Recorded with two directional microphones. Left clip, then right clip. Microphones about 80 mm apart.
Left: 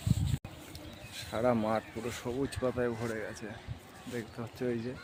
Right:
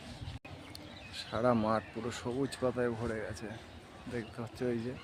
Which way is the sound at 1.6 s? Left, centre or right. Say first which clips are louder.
Even; right.